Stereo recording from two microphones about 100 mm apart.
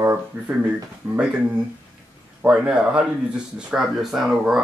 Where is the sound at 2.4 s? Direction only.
10° right (ahead or behind).